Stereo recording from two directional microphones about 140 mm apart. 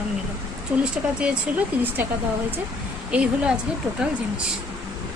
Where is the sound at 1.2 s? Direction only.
10° right (ahead or behind).